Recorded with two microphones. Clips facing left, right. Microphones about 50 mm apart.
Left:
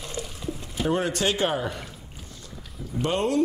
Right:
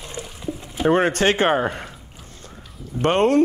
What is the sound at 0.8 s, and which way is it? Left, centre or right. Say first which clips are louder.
Speech: right 7 dB; right.